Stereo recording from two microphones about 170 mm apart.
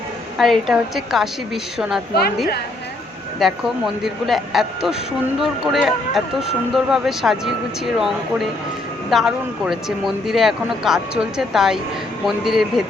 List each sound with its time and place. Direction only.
0.3 s speech: centre (ahead or behind)
3.3 s speech: centre (ahead or behind)